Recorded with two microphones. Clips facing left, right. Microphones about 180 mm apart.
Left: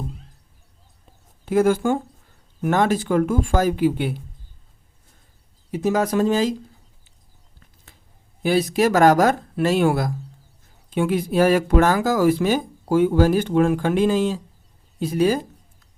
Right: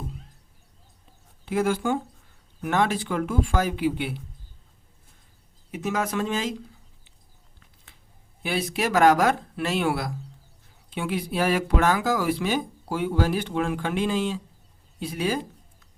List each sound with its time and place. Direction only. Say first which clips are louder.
1.5 s speech: left 6 dB; 45° left (ahead or behind)
5.7 s speech: left 7 dB; 35° left (ahead or behind)
8.4 s speech: left 8 dB; 40° left (ahead or behind)